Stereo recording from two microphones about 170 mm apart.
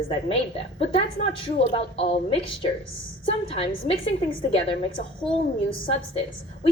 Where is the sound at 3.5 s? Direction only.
35° left (ahead or behind).